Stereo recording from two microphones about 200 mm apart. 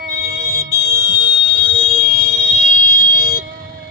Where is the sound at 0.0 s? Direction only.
50° right (ahead or behind).